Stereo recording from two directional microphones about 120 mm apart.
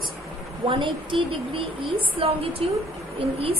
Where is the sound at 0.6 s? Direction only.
45° right (ahead or behind).